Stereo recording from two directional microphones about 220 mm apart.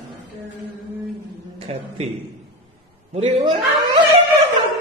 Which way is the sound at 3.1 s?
25° right (ahead or behind).